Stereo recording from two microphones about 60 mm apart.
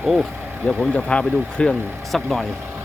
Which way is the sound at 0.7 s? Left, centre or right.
Centre.